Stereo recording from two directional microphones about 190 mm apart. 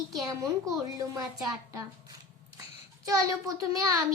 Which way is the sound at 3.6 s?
15° right (ahead or behind).